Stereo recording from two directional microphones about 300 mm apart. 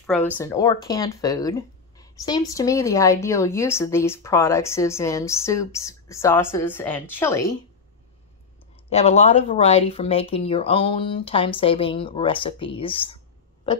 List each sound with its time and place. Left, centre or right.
0.0 s speech: centre
8.8 s speech: left